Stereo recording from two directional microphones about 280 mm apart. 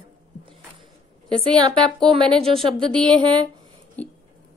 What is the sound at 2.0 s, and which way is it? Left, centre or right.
A woman's voice, centre.